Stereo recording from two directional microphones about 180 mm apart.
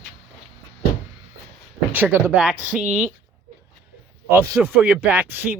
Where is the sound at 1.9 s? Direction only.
10° right (ahead or behind).